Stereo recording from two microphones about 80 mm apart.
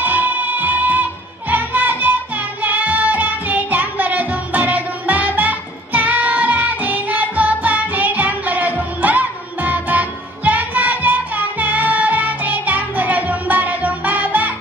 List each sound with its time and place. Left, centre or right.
0.0 s music: right